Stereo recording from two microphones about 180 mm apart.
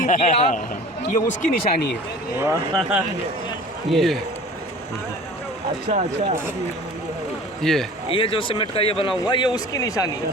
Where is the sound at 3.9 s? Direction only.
Centre (ahead or behind).